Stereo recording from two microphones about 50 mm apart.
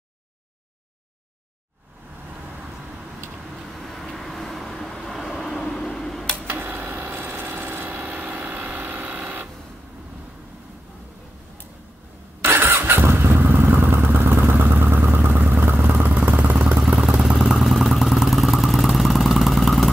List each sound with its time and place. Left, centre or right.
3.6 s vehicle: centre
6.3 s a sound: right
12.4 s motorcycle: right
16.9 s vehicle: centre
17.6 s vehicle: centre